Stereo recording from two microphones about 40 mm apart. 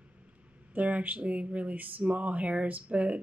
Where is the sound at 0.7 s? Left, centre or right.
Right.